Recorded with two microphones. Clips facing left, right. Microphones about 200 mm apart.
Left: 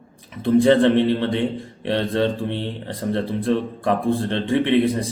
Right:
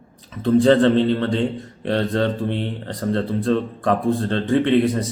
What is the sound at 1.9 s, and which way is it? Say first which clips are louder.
A man's voice: even; 20° left (ahead or behind).